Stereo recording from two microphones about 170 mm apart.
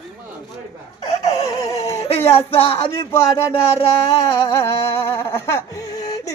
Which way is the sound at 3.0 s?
15° left (ahead or behind).